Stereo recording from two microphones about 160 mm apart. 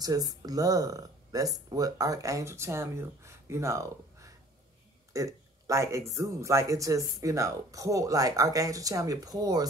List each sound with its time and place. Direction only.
0.0 s speech: 25° right (ahead or behind)